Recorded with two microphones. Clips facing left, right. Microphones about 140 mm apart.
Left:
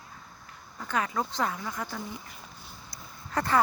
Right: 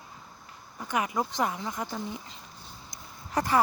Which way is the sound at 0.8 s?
15° right (ahead or behind).